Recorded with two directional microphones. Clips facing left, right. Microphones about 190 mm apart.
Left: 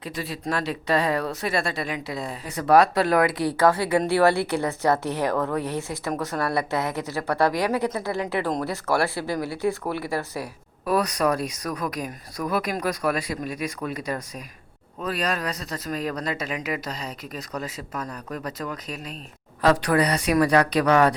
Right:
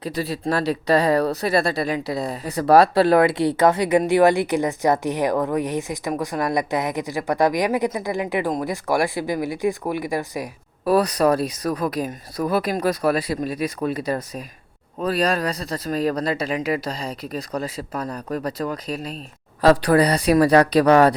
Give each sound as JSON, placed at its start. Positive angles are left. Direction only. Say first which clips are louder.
{"t": 0.0, "sound": "speech", "louder": "right 6 dB", "side_deg": -35}
{"t": 10.8, "sound": "speech", "louder": "right 5 dB", "side_deg": -30}